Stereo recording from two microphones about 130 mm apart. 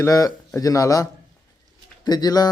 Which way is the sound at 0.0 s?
25° left (ahead or behind).